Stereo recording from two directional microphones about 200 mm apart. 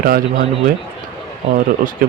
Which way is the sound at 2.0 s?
50° right (ahead or behind).